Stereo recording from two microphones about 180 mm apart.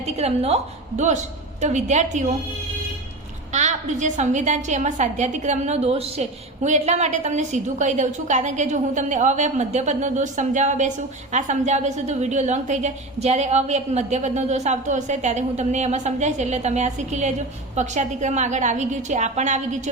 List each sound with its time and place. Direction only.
0.2 s a woman's voice: 35° right (ahead or behind)
3.5 s a woman's voice: 40° right (ahead or behind)